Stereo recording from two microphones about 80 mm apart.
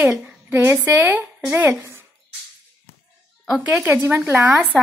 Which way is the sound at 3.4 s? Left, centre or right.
Centre.